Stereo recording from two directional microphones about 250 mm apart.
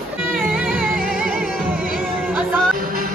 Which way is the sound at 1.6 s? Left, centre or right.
Right.